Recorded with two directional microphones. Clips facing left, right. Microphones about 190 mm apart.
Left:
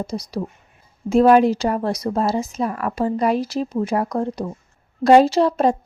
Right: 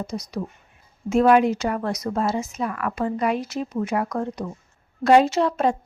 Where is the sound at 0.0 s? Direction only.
35° left (ahead or behind).